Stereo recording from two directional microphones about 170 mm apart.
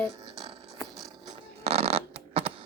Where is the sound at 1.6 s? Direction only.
35° right (ahead or behind).